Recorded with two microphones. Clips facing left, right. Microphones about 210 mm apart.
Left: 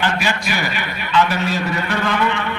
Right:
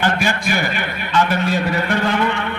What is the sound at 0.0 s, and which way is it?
Speech, 50° right (ahead or behind).